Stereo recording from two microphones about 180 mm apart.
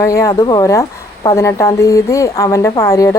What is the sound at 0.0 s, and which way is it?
A woman's voice, 20° left (ahead or behind).